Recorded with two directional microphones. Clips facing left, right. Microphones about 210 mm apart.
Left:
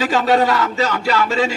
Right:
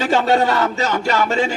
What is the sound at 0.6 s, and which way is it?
Speech, 40° right (ahead or behind).